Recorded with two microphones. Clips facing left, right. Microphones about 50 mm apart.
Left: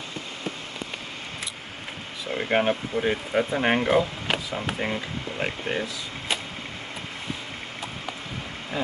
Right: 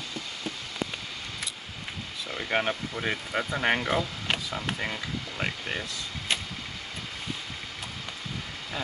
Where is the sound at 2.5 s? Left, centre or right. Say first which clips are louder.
Left 5 dB; left.